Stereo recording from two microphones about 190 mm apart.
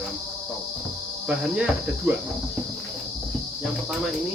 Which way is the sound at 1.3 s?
5° right (ahead or behind).